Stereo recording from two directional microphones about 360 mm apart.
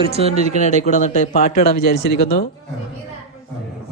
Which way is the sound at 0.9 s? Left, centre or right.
Centre.